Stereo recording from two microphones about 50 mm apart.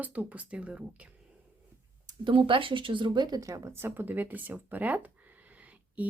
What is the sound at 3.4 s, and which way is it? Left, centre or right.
Speech, right.